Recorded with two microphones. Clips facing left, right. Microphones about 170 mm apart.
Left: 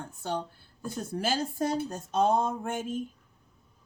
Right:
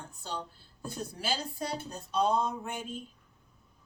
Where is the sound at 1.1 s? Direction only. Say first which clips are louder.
Left 8 dB; 50° left (ahead or behind).